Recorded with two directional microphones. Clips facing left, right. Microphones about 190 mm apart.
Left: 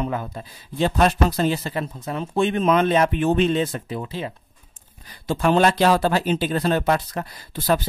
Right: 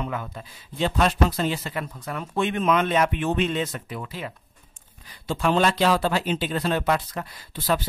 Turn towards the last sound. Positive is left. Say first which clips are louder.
# left 4 dB
turn(degrees=40)  # may be behind; listen again after turning